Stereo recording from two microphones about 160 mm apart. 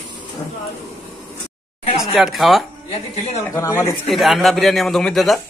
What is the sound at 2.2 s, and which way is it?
Speech, centre (ahead or behind).